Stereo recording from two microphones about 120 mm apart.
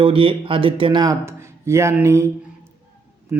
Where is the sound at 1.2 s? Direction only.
20° right (ahead or behind).